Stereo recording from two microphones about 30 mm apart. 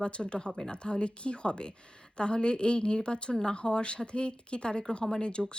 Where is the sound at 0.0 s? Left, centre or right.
Left.